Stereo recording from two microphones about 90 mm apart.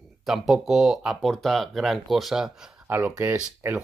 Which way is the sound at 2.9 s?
20° right (ahead or behind).